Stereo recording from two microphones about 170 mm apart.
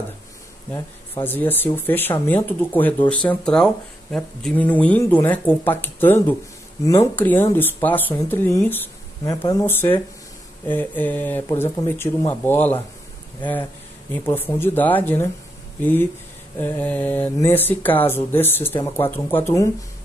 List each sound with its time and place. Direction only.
1.2 s speech: 10° left (ahead or behind)
8.6 s a sound: 10° left (ahead or behind)
9.5 s speech: 15° left (ahead or behind)
14.1 s speech: 10° left (ahead or behind)